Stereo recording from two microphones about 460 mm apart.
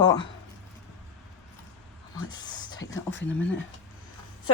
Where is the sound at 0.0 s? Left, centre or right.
Centre.